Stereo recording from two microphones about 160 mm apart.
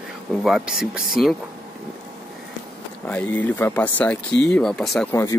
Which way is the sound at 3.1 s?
10° left (ahead or behind).